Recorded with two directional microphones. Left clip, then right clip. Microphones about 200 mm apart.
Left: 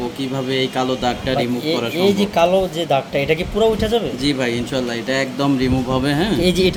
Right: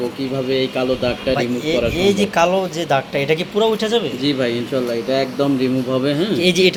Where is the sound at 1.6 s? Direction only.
5° left (ahead or behind).